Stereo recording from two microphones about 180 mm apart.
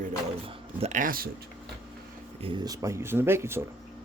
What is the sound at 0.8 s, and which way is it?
Speech, 45° right (ahead or behind).